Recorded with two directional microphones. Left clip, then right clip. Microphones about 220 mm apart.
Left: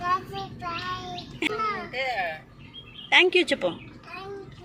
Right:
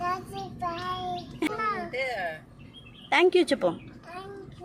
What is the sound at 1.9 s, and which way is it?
Speech, 55° right (ahead or behind).